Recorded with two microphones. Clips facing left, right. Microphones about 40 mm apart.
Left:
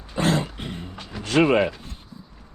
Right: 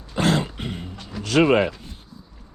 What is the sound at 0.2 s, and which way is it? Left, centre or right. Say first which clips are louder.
Throat clearing: right 1 dB; right.